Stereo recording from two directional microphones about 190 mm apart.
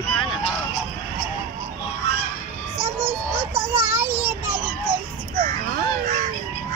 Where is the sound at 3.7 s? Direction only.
10° right (ahead or behind).